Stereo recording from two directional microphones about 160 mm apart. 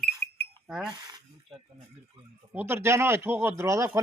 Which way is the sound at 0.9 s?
25° right (ahead or behind).